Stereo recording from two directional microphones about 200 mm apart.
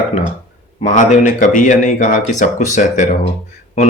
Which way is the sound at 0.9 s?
40° left (ahead or behind).